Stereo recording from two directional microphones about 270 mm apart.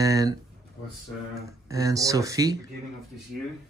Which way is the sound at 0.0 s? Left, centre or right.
Centre.